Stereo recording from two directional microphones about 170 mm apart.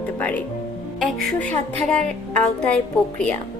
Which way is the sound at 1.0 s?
5° left (ahead or behind).